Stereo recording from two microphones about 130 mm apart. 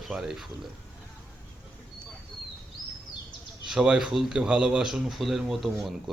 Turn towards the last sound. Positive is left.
turn(degrees=0)  # may be behind; listen again after turning